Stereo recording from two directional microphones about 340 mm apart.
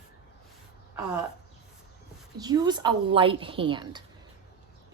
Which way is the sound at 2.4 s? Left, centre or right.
Centre.